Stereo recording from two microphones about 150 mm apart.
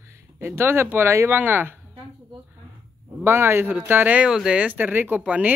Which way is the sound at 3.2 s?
15° right (ahead or behind).